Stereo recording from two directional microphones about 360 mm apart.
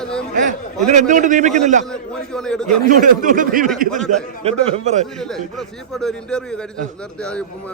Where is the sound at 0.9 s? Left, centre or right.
Centre.